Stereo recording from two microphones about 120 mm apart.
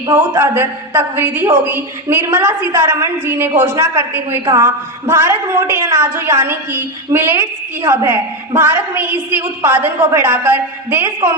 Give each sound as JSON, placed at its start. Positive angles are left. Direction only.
{"t": 0.1, "sound": "a woman's voice", "side_deg": -20}